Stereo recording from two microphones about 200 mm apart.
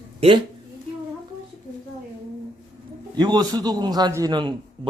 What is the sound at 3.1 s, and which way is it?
A man's voice, 20° right (ahead or behind).